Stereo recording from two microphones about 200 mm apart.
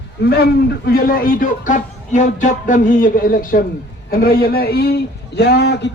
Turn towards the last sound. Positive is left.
turn(degrees=55)  # may be behind; listen again after turning